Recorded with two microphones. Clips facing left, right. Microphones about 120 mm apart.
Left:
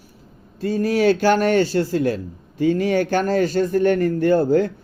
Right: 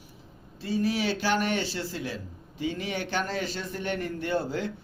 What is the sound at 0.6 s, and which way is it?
Speech, 45° left (ahead or behind).